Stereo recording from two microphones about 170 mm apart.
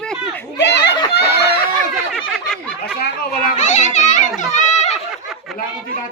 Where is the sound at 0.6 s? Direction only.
90° left.